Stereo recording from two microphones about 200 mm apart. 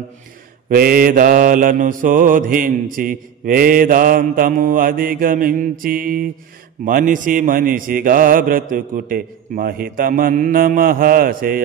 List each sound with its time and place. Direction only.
0.7 s mantra: 45° right (ahead or behind)